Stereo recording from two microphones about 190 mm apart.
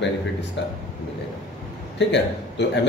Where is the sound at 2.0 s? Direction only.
65° left (ahead or behind).